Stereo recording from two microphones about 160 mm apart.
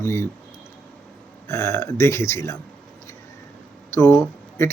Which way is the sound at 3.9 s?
15° left (ahead or behind).